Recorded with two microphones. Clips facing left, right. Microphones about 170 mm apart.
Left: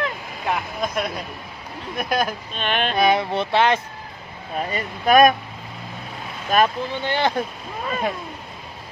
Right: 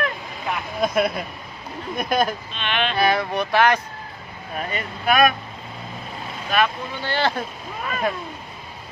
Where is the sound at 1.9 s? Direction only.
5° left (ahead or behind).